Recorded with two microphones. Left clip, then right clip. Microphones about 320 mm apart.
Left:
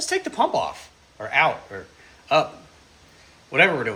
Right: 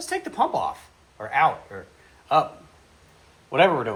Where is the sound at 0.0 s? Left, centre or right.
Centre.